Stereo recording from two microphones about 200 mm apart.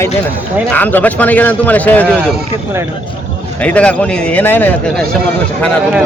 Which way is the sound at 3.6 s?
5° left (ahead or behind).